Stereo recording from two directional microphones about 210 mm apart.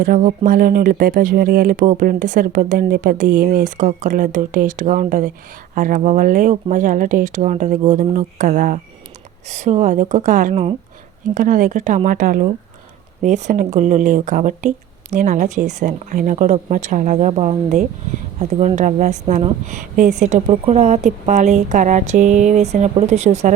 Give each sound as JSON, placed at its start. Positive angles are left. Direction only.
{"t": 0.0, "sound": "speech", "side_deg": -40}